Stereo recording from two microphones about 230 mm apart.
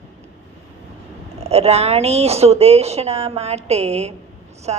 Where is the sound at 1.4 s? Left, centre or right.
Right.